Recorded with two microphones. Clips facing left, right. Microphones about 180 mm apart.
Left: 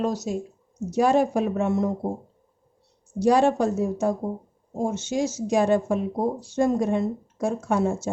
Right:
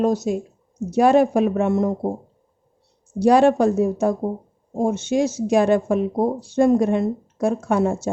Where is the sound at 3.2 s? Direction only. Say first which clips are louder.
Right 5 dB; 65° right (ahead or behind).